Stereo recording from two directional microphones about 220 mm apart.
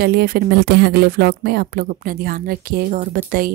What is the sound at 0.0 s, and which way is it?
A woman's voice, 45° right (ahead or behind).